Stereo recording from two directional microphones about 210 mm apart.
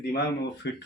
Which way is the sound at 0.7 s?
55° left (ahead or behind).